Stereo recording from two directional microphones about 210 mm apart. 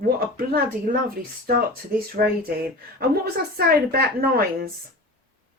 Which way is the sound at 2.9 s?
45° right (ahead or behind).